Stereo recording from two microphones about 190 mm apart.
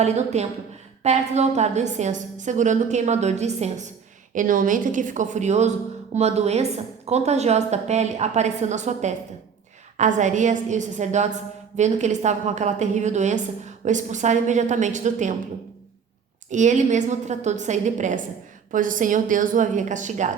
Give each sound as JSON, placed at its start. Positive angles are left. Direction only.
{"t": 0.0, "sound": "a woman's voice", "side_deg": -35}
{"t": 16.5, "sound": "a woman's voice", "side_deg": -40}